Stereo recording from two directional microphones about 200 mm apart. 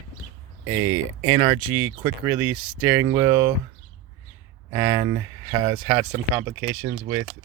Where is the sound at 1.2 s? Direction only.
15° right (ahead or behind).